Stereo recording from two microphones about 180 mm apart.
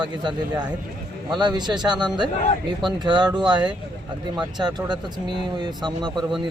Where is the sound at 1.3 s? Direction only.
25° right (ahead or behind).